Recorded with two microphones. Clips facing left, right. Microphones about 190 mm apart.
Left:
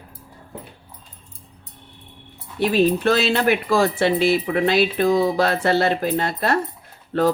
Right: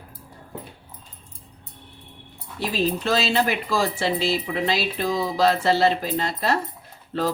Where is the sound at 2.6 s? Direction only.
60° left (ahead or behind).